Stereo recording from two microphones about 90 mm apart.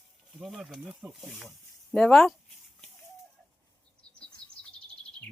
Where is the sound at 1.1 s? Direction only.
Centre (ahead or behind).